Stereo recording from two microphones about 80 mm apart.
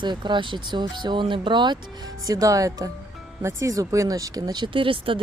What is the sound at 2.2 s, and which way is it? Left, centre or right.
Speech, right.